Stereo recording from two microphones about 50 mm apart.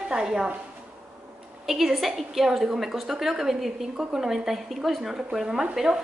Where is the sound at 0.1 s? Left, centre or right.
Centre.